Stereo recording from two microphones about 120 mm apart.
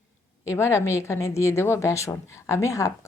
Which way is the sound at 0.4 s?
25° left (ahead or behind).